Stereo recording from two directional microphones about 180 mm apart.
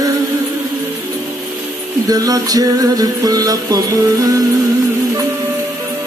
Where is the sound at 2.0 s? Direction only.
20° right (ahead or behind).